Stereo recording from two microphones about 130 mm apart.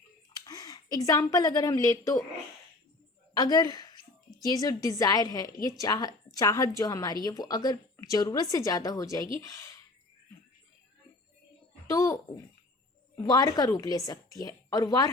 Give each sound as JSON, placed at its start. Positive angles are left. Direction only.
{"t": 0.3, "sound": "speech", "side_deg": 30}
{"t": 3.3, "sound": "a woman's voice", "side_deg": 30}
{"t": 11.9, "sound": "speech", "side_deg": 25}
{"t": 13.2, "sound": "a woman's voice", "side_deg": 30}